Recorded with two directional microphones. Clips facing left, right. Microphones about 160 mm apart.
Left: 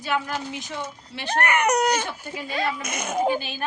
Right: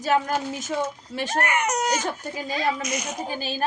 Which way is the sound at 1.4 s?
60° left (ahead or behind).